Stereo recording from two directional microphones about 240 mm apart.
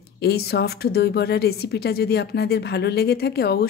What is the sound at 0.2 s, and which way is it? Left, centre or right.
A woman's voice, left.